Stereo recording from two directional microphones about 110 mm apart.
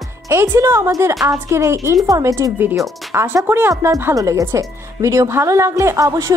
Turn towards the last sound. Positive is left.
turn(degrees=-30)  # may be behind; listen again after turning